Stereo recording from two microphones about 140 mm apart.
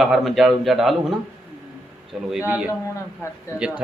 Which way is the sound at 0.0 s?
Centre (ahead or behind).